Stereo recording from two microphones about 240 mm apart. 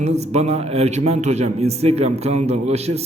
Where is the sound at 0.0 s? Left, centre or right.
Right.